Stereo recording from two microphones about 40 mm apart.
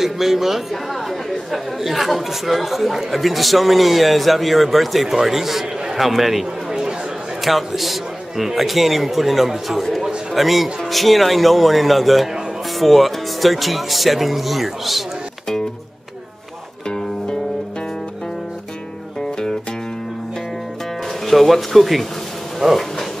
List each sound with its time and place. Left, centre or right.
0.0 s speech: centre
1.0 s chatter: centre
1.8 s speech: centre
6.7 s chatter: centre
7.4 s a man's voice: centre
21.3 s speech: centre